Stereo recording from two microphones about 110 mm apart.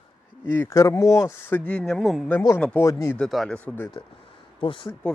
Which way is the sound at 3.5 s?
15° left (ahead or behind).